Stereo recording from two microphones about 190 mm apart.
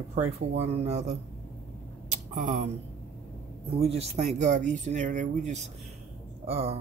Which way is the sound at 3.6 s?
35° right (ahead or behind).